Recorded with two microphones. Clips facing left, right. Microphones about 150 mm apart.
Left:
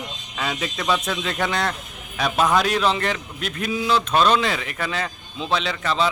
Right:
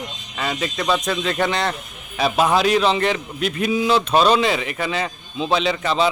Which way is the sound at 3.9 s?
30° right (ahead or behind).